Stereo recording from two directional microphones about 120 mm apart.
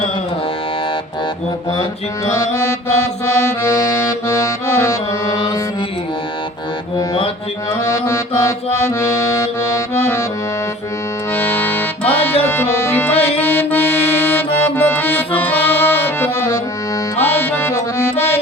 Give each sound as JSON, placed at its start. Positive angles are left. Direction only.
{"t": 2.3, "sound": "music", "side_deg": 25}
{"t": 7.9, "sound": "music", "side_deg": 25}
{"t": 9.0, "sound": "accordion", "side_deg": 25}
{"t": 11.3, "sound": "accordion", "side_deg": 15}
{"t": 17.2, "sound": "music", "side_deg": 15}